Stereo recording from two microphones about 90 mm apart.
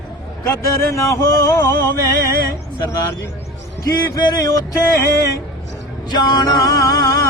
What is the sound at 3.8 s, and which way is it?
Speech, 45° left (ahead or behind).